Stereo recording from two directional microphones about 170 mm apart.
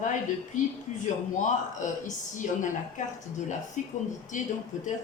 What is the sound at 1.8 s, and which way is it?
A woman's voice, 45° left (ahead or behind).